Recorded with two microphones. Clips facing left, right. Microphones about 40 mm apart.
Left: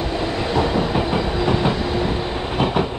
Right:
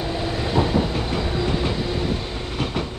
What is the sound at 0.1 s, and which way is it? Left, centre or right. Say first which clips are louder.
Train: left 1 dB; centre.